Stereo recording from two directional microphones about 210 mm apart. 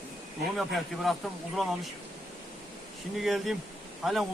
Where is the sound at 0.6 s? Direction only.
Centre (ahead or behind).